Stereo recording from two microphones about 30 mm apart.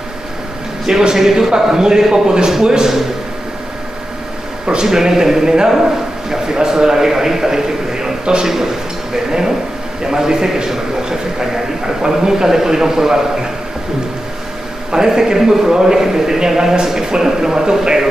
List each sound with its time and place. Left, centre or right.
0.8 s a man's voice: centre
4.8 s a man's voice: centre
9.1 s a man's voice: centre
14.9 s a man's voice: right